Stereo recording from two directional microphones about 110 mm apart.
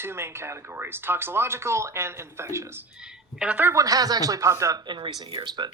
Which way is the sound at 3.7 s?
35° right (ahead or behind).